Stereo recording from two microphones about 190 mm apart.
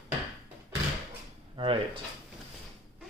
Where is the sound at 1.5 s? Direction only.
25° right (ahead or behind).